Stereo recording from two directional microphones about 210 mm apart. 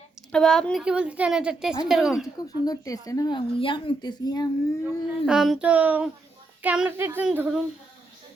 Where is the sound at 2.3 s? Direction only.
20° left (ahead or behind).